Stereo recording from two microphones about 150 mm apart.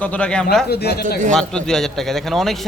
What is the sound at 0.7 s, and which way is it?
Speech, 90° left.